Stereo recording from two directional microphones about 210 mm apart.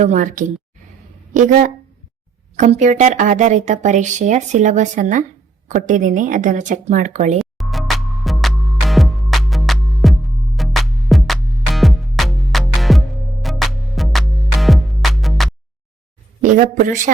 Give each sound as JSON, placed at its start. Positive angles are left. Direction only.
{"t": 0.0, "sound": "speech", "side_deg": -35}
{"t": 7.3, "sound": "music", "side_deg": 0}
{"t": 16.4, "sound": "speech", "side_deg": -35}